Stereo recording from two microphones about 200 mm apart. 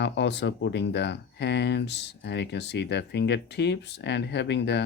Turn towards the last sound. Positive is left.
turn(degrees=60)  # may be behind; listen again after turning